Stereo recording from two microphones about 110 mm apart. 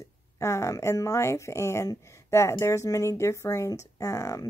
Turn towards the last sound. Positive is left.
turn(degrees=30)  # may be behind; listen again after turning